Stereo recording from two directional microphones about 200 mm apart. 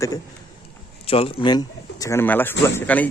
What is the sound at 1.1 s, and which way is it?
A man's voice, 30° left (ahead or behind).